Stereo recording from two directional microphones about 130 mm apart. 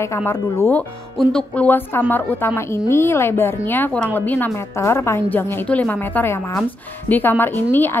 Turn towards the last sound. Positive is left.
turn(degrees=15)  # may be behind; listen again after turning